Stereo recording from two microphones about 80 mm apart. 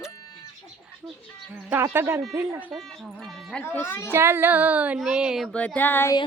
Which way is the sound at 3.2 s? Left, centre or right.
Centre.